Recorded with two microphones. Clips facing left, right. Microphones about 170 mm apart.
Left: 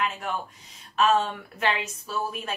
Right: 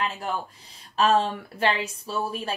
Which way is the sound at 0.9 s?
35° right (ahead or behind).